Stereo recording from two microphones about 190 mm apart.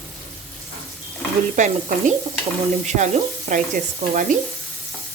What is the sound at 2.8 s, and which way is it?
Speech, 40° right (ahead or behind).